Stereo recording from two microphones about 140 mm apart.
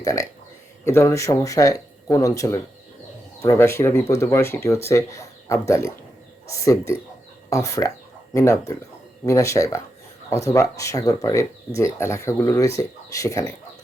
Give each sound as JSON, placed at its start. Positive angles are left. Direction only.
{"t": 0.0, "sound": "speech", "side_deg": 25}